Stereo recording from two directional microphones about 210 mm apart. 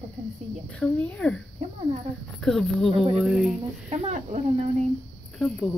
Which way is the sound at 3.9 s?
35° right (ahead or behind).